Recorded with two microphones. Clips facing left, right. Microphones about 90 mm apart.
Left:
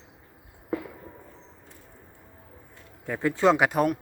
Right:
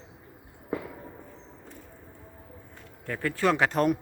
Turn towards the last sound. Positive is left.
turn(degrees=10)  # may be behind; listen again after turning